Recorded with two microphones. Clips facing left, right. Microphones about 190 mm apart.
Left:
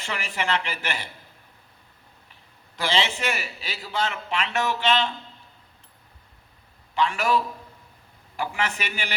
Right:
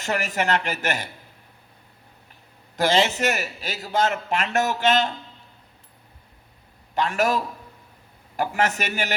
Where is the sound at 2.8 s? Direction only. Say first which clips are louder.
Right 5 dB; 45° right (ahead or behind).